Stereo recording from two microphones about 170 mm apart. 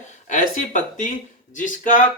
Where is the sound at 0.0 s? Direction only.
45° left (ahead or behind).